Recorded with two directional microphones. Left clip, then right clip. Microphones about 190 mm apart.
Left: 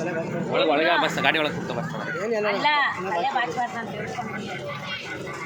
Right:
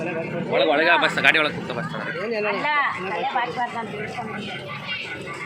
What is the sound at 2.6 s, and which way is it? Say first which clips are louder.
Speech: left 1 dB; 45° right (ahead or behind).